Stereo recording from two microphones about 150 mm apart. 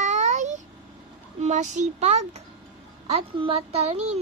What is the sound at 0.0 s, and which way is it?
Babbling, 50° right (ahead or behind).